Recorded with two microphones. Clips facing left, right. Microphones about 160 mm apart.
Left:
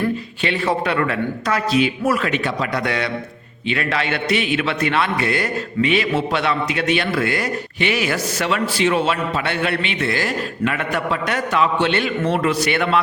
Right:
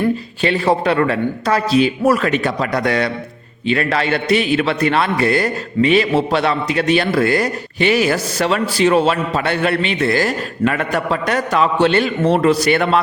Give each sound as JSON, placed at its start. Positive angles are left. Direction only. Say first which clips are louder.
{"t": 0.4, "sound": "a man's voice", "louder": "right 5 dB", "side_deg": -35}